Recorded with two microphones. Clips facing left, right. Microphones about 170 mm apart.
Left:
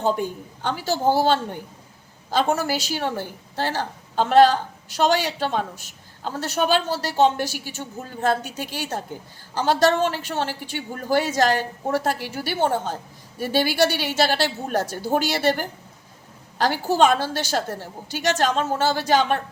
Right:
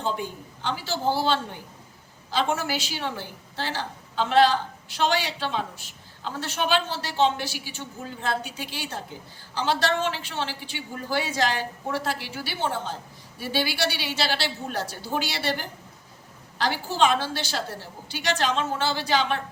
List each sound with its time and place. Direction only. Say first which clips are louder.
0.0 s a woman's voice: left 6 dB; 45° left (ahead or behind)